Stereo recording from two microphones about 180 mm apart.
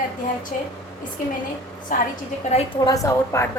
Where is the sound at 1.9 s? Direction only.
45° left (ahead or behind).